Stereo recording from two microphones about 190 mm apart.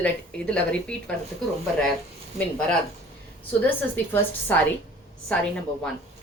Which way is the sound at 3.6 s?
10° left (ahead or behind).